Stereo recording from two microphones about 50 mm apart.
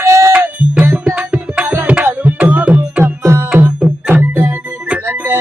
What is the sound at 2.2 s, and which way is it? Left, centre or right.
Music, right.